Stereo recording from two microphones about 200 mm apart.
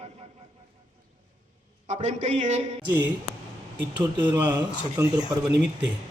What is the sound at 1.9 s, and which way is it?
Speech, 35° right (ahead or behind).